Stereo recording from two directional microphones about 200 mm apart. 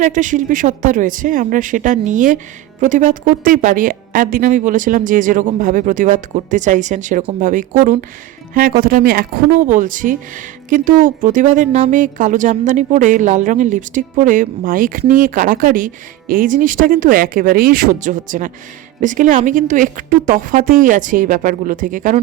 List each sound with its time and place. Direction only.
0.0 s a woman's voice: 40° right (ahead or behind)